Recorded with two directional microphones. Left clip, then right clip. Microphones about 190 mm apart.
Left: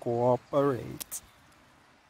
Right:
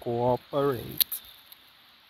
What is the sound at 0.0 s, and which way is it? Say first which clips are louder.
Speech: even; 20° left (ahead or behind).